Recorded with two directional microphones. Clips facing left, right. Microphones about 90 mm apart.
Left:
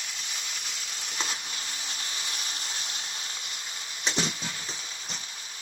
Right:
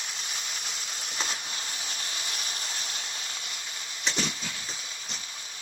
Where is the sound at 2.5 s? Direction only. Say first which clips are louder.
Right 1 dB; 35° right (ahead or behind).